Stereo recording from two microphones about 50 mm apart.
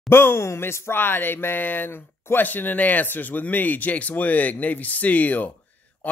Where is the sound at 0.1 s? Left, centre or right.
Left.